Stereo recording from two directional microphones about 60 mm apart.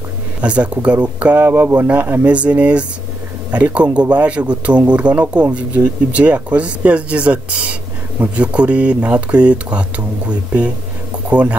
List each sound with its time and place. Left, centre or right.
0.4 s speech: right
1.4 s speech: right